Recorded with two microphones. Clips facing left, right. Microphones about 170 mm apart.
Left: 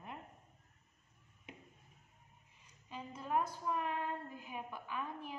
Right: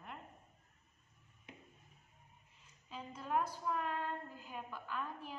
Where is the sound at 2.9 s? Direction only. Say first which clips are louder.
Left 1 dB; 5° left (ahead or behind).